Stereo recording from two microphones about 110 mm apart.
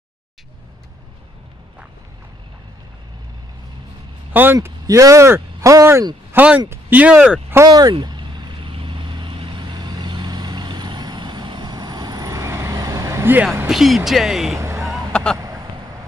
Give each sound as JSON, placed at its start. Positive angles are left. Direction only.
{"t": 4.3, "sound": "speech", "side_deg": -15}
{"t": 4.8, "sound": "speech", "side_deg": -30}
{"t": 6.3, "sound": "speech", "side_deg": -15}
{"t": 7.5, "sound": "speech", "side_deg": -35}
{"t": 7.9, "sound": "vehicle", "side_deg": -45}
{"t": 13.7, "sound": "speech", "side_deg": 0}
{"t": 15.0, "sound": "a sound", "side_deg": 5}
{"t": 15.3, "sound": "a sound", "side_deg": -30}